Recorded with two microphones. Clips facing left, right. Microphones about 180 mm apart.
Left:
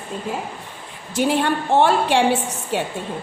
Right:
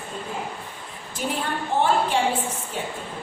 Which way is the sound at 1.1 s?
75° left (ahead or behind).